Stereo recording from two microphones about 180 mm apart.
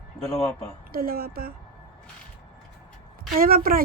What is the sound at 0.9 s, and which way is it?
Speech, 55° right (ahead or behind).